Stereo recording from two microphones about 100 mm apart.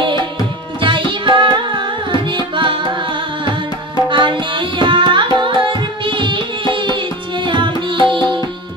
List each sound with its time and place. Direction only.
0.7 s music: 55° right (ahead or behind)
4.1 s tabla: 55° right (ahead or behind)
7.4 s music: 50° right (ahead or behind)